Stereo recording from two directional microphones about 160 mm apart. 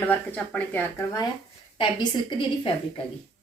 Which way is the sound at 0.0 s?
10° left (ahead or behind).